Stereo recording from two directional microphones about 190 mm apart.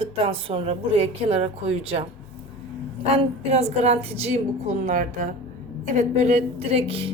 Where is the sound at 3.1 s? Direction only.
35° right (ahead or behind).